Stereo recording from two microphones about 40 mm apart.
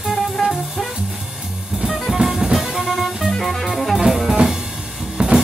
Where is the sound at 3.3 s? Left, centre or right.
Centre.